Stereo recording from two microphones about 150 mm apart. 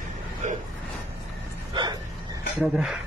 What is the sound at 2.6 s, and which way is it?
Speech, 5° right (ahead or behind).